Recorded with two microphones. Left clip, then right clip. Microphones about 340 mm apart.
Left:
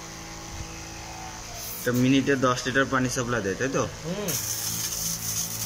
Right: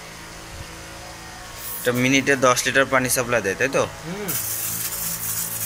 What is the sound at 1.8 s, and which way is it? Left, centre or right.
Speech, centre.